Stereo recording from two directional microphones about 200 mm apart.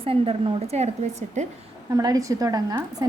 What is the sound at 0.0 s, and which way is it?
A woman's voice, 30° right (ahead or behind).